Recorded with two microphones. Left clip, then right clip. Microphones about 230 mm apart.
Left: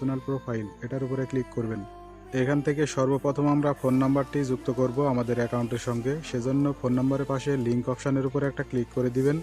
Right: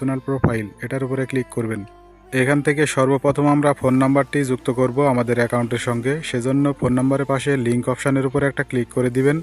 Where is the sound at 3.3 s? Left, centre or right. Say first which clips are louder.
Right 8 dB; right.